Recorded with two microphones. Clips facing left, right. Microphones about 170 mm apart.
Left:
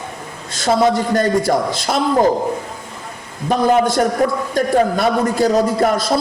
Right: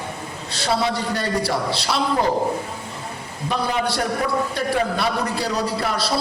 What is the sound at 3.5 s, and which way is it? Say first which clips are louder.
A man's voice: left 9 dB; 45° left (ahead or behind).